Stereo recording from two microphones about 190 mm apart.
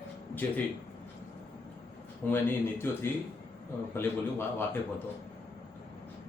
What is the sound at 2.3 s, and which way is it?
A man's voice, 10° left (ahead or behind).